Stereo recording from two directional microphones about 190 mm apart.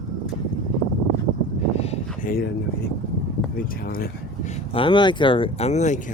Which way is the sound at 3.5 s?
50° left (ahead or behind).